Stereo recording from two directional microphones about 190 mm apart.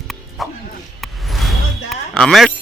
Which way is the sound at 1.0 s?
Centre (ahead or behind).